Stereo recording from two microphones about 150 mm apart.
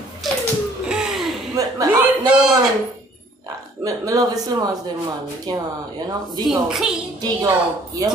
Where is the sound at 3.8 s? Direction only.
25° right (ahead or behind).